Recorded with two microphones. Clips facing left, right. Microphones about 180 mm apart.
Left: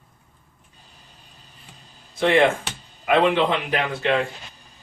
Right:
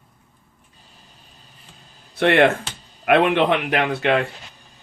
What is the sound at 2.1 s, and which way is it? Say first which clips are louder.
A man's voice: right 2 dB; 65° right (ahead or behind).